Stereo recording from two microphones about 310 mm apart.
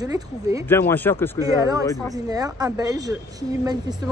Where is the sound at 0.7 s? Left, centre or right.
Centre.